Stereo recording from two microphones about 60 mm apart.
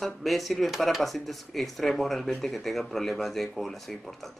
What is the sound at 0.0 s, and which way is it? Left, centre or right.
Speech, centre.